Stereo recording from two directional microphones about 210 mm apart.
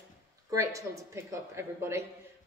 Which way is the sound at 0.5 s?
15° right (ahead or behind).